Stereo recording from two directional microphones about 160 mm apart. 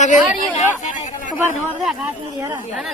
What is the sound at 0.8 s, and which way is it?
Speech, 50° left (ahead or behind).